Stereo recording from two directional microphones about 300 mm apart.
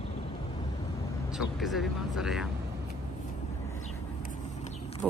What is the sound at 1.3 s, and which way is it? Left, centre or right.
Speech, centre.